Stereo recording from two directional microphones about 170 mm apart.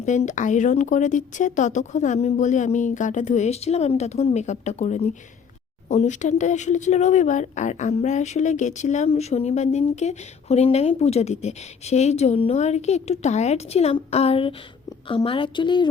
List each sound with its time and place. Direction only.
0.0 s a woman's voice: 45° left (ahead or behind); by 15.9 s 25° left (ahead or behind)